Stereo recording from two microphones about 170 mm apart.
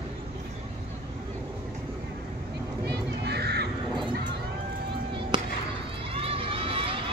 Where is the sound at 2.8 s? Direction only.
75° right (ahead or behind).